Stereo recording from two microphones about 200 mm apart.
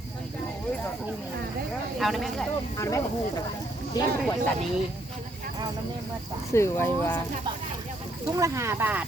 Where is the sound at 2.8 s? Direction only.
15° left (ahead or behind).